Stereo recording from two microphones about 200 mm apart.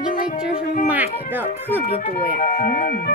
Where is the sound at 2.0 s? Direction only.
40° left (ahead or behind).